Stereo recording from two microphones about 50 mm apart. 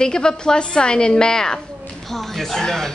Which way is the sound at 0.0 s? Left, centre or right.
Centre.